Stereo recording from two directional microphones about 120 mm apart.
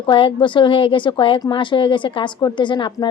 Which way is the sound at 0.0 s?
45° left (ahead or behind).